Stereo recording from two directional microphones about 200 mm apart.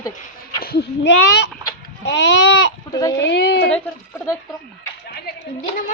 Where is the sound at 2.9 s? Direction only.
15° left (ahead or behind).